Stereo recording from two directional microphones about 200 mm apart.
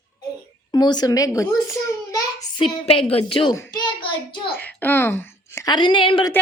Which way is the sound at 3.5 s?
15° left (ahead or behind).